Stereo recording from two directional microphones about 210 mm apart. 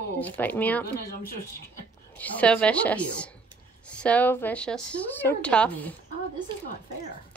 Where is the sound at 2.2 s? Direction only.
5° left (ahead or behind).